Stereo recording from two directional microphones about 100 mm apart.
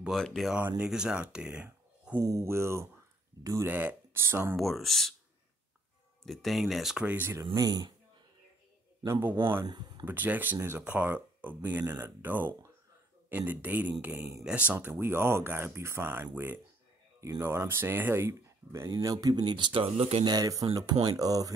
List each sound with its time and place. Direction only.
0.1 s speech: centre (ahead or behind)
0.6 s speech: 15° right (ahead or behind)
2.1 s speech: 30° right (ahead or behind)
4.6 s speech: centre (ahead or behind)
6.2 s speech: centre (ahead or behind)
7.1 s speech: 20° right (ahead or behind)
7.5 s speech: 40° right (ahead or behind)
9.0 s speech: 25° right (ahead or behind)
9.7 s speech: 45° right (ahead or behind)
10.0 s speech: 15° right (ahead or behind)
18.9 s speech: 40° right (ahead or behind); by 20.2 s 90° right
20.2 s speech: 35° right (ahead or behind)